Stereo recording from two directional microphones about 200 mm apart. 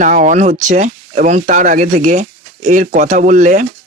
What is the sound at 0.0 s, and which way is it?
Speech, 40° right (ahead or behind).